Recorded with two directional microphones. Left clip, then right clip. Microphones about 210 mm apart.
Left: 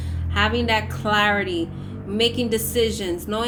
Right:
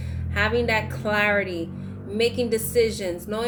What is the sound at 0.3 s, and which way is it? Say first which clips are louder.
A woman's voice: left 2 dB; 25° left (ahead or behind).